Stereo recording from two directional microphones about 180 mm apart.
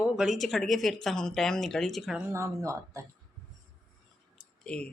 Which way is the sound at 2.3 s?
15° right (ahead or behind).